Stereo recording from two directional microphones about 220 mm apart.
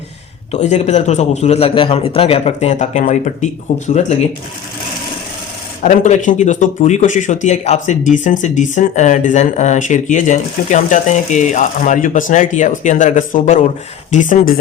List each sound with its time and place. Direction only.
0.5 s speech: 30° left (ahead or behind)
5.8 s speech: 35° left (ahead or behind)